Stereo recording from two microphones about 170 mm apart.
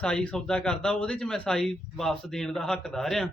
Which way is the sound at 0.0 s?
5° left (ahead or behind).